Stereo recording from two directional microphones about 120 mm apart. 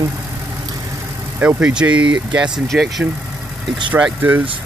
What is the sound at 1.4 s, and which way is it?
Speech, 10° right (ahead or behind).